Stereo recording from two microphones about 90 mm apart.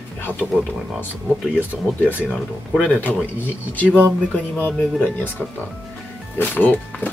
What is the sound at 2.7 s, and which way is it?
Speech, 15° left (ahead or behind).